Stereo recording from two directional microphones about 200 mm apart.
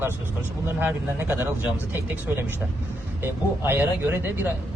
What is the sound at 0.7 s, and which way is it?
Speech, 10° right (ahead or behind).